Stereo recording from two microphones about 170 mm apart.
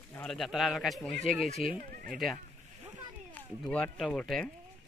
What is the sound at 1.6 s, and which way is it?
Speech, 55° right (ahead or behind).